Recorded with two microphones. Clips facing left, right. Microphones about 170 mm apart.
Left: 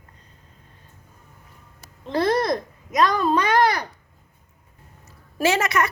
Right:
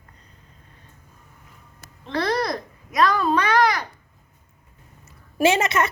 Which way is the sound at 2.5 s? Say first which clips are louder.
Left 4 dB; 20° left (ahead or behind).